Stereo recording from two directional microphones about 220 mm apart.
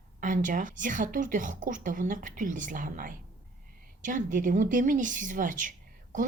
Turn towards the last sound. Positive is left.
turn(degrees=-35)  # may be behind; listen again after turning